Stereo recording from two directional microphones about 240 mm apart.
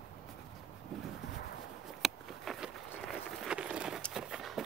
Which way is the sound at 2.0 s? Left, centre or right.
Centre.